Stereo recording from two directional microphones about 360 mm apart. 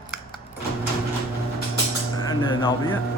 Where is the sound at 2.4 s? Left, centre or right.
Centre.